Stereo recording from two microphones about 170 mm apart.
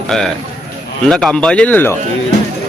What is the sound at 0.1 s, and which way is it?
Speech, centre (ahead or behind).